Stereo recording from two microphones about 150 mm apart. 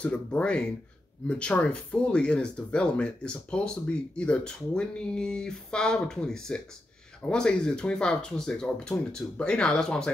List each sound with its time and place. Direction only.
0.0 s speech: 10° left (ahead or behind)